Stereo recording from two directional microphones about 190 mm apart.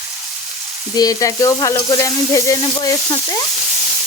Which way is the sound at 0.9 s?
20° left (ahead or behind).